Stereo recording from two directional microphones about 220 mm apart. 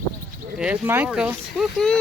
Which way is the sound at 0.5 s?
5° right (ahead or behind).